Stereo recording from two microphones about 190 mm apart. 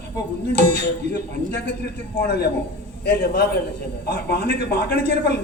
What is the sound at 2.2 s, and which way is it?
A man's voice, 55° left (ahead or behind).